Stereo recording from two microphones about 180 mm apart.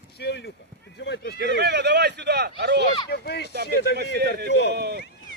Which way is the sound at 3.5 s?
65° right (ahead or behind).